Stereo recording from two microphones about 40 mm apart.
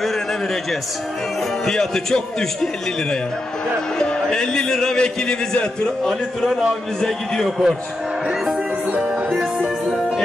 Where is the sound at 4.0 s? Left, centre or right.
Centre.